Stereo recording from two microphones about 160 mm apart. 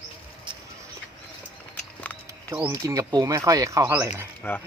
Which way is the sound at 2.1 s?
10° left (ahead or behind).